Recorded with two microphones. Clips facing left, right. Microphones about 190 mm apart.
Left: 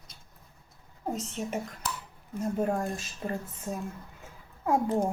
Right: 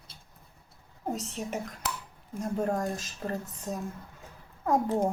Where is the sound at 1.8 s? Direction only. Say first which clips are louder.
Right 1 dB; 65° right (ahead or behind).